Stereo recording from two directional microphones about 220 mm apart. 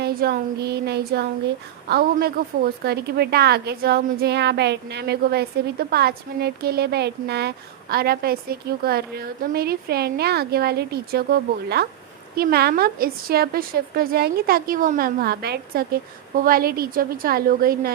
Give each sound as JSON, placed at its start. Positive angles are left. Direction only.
{"t": 0.0, "sound": "speech", "side_deg": -45}